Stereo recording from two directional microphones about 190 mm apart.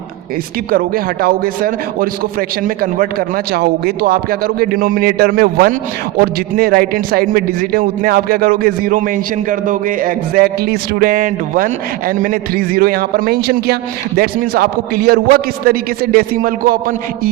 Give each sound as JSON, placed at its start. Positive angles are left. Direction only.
{"t": 0.7, "sound": "a man's voice", "side_deg": -50}